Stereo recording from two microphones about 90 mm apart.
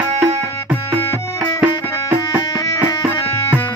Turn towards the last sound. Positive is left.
turn(degrees=-15)  # may be behind; listen again after turning